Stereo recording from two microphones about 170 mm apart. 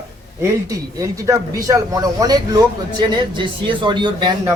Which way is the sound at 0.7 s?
20° right (ahead or behind).